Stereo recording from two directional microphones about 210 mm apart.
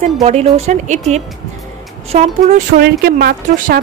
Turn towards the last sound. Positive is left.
turn(degrees=-45)  # may be behind; listen again after turning